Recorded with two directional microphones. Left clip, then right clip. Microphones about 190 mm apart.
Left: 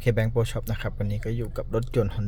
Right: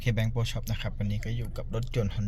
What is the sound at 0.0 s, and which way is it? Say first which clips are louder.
A man's voice: left 8 dB; 40° left (ahead or behind).